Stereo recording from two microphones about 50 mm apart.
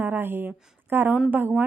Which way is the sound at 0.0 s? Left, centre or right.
Right.